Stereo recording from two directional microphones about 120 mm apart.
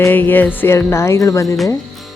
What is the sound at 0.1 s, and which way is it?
Music, 15° left (ahead or behind).